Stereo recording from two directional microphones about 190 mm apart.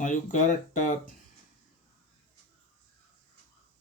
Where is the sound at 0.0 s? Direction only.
40° left (ahead or behind).